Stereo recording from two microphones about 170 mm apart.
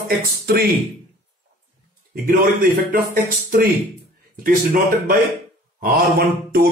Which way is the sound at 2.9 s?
55° right (ahead or behind).